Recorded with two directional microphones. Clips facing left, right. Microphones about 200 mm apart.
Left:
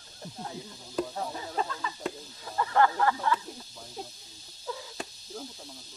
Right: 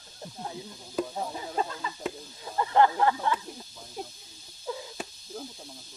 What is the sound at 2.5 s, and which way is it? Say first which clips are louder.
Speech: right 2 dB; 20° right (ahead or behind).